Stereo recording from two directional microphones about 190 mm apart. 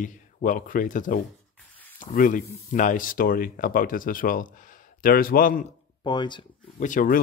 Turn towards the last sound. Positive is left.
turn(degrees=45)  # may be behind; listen again after turning